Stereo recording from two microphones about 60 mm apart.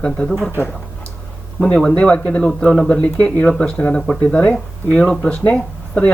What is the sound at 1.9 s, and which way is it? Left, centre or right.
Speech, centre.